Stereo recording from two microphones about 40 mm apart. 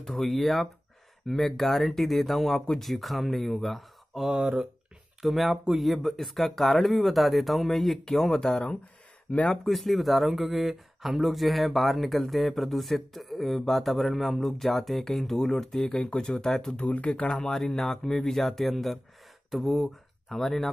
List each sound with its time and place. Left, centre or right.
0.2 s speech: centre
4.2 s speech: centre
5.2 s speech: centre
9.3 s speech: left
9.7 s speech: centre
15.9 s speech: left
16.7 s speech: left
17.3 s speech: centre